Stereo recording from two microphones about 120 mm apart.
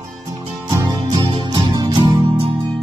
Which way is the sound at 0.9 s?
35° right (ahead or behind).